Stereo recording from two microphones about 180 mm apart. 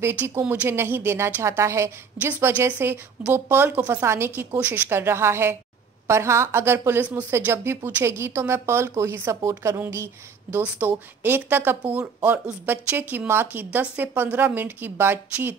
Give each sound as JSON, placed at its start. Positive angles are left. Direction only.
{"t": 0.0, "sound": "speech", "side_deg": -10}